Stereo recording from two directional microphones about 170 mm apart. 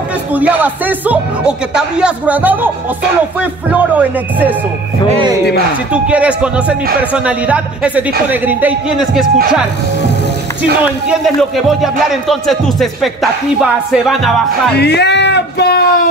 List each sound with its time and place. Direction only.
0.3 s speech: 10° right (ahead or behind)
5.9 s speech: 5° right (ahead or behind)
10.8 s speech: 5° right (ahead or behind)
14.8 s speech: 80° left